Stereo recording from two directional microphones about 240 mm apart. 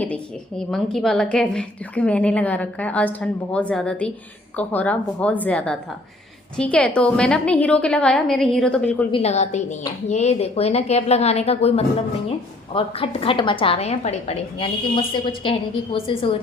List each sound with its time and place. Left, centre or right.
0.0 s a woman's voice: centre
9.1 s a woman's voice: left
12.7 s a woman's voice: left